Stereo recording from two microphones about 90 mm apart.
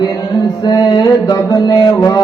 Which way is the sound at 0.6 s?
45° left (ahead or behind).